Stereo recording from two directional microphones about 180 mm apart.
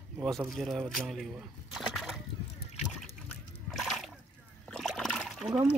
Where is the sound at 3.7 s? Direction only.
Centre (ahead or behind).